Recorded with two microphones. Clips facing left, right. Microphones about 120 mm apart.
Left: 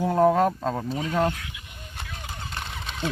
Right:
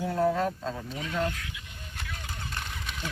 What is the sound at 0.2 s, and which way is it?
Speech, 50° left (ahead or behind).